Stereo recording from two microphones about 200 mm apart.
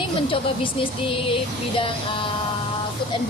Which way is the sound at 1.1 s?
25° left (ahead or behind).